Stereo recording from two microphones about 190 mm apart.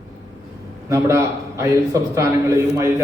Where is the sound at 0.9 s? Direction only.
15° right (ahead or behind).